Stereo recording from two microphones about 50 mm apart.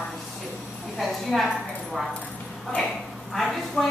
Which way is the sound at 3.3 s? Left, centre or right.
Centre.